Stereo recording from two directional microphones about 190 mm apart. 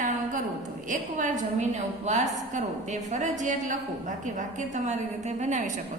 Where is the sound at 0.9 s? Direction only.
40° right (ahead or behind).